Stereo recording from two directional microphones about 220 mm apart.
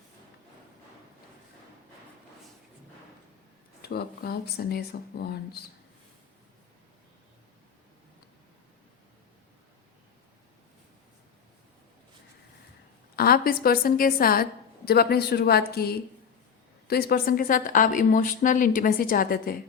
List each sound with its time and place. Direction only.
3.8 s speech: 45° left (ahead or behind)
13.1 s a woman's voice: 40° left (ahead or behind)